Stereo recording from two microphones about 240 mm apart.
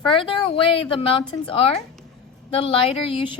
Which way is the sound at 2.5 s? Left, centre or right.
Left.